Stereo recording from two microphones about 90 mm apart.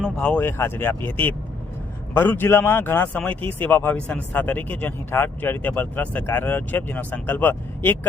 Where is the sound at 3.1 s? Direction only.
15° left (ahead or behind).